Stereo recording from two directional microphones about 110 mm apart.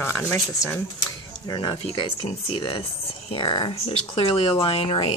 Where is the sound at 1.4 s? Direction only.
40° left (ahead or behind).